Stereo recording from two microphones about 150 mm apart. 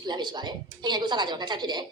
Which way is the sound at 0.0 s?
30° right (ahead or behind).